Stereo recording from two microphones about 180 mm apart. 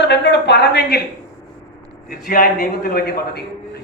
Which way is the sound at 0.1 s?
70° left (ahead or behind).